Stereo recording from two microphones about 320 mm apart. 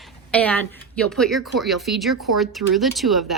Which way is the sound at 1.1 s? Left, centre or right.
Centre.